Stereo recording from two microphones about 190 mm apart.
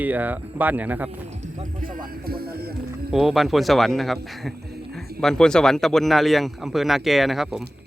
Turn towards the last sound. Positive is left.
turn(degrees=0)  # may be behind; listen again after turning